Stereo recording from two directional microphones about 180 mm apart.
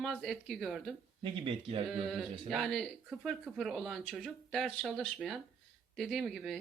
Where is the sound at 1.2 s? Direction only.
30° right (ahead or behind).